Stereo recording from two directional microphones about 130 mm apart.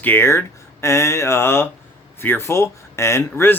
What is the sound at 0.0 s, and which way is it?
Speech, 15° left (ahead or behind).